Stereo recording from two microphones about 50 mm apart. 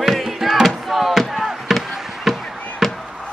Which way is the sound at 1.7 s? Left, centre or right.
Centre.